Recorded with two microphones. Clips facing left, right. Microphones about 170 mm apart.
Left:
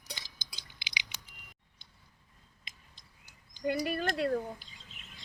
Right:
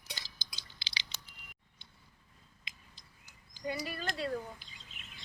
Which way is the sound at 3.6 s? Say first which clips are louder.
Left 6 dB; 60° left (ahead or behind).